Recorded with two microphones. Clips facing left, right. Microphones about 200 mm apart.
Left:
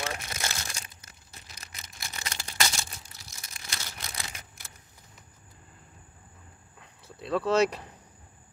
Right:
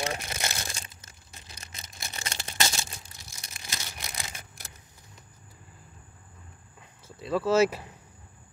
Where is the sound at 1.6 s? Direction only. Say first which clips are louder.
Right 1 dB; 25° right (ahead or behind).